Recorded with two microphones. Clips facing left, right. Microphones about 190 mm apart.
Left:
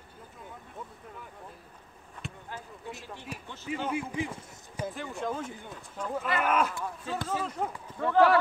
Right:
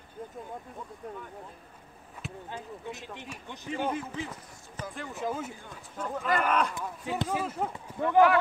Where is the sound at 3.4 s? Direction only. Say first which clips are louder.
Right 1 dB; 15° right (ahead or behind).